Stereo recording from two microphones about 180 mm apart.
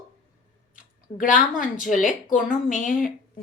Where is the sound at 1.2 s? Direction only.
45° left (ahead or behind).